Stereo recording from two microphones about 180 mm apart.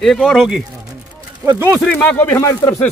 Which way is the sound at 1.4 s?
15° right (ahead or behind).